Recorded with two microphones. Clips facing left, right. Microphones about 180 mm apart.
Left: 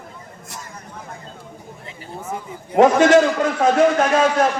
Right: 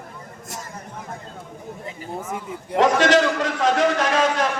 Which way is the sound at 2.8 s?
50° left (ahead or behind).